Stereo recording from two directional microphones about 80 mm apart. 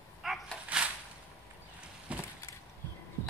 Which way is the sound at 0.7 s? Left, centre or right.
Centre.